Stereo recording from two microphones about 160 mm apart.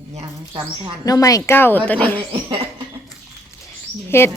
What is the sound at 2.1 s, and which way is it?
Speech, 35° right (ahead or behind).